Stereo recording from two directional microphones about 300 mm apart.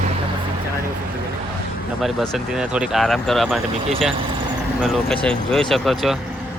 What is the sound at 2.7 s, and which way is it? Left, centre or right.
Speech, centre.